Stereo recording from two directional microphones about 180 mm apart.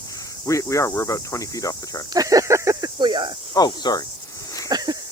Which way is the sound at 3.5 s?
20° left (ahead or behind).